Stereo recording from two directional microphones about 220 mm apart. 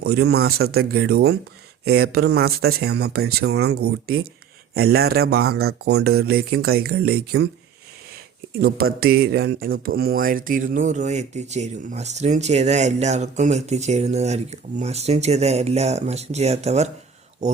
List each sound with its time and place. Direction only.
0.0 s speech: 45° right (ahead or behind)
8.6 s speech: 45° right (ahead or behind)